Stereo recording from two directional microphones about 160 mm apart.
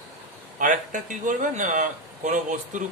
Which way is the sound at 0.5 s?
55° right (ahead or behind).